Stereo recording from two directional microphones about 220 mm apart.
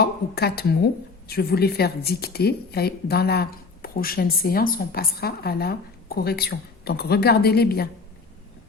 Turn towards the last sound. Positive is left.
turn(degrees=45)  # may be behind; listen again after turning